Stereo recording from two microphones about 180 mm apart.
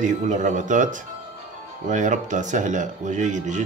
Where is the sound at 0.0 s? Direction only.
45° right (ahead or behind).